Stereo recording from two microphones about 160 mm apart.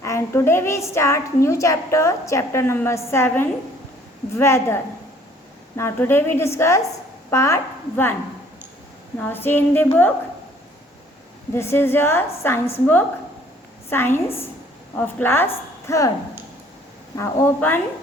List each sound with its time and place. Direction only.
0.0 s a woman's voice: 15° left (ahead or behind)
9.1 s a woman's voice: 10° left (ahead or behind)
11.5 s a woman's voice: 15° left (ahead or behind)
17.2 s a woman's voice: 10° left (ahead or behind)